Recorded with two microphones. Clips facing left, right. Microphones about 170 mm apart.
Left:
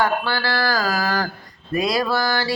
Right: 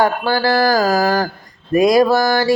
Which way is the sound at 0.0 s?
40° right (ahead or behind).